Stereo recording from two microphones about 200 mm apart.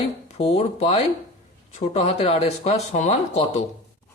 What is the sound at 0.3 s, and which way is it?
A man's voice, 30° left (ahead or behind).